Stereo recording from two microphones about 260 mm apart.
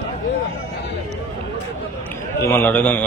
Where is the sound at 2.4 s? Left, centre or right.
Centre.